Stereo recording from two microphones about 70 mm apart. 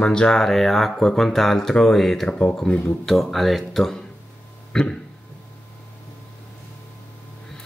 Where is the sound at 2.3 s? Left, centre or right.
Centre.